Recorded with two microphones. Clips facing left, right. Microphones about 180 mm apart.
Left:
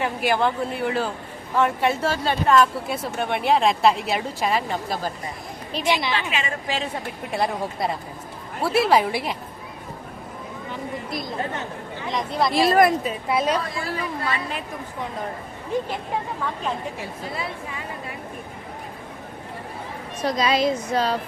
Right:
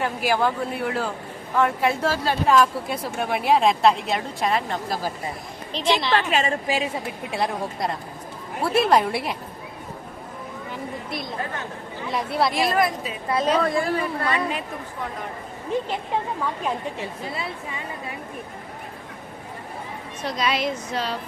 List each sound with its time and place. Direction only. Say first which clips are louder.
0.0 s speech: even; centre (ahead or behind)
5.9 s a woman's voice: right 2 dB; 15° left (ahead or behind)
6.1 s a woman's voice: right 5 dB; 40° right (ahead or behind)
6.7 s speech: right 2 dB; 10° right (ahead or behind)
11.1 s speech: left 2 dB; centre (ahead or behind)
12.7 s a woman's voice: left 5 dB; 45° left (ahead or behind)
13.2 s a woman's voice: right 1 dB; 10° left (ahead or behind)
13.6 s speech: right 6 dB; 50° right (ahead or behind)
20.2 s a woman's voice: left 4 dB; 40° left (ahead or behind)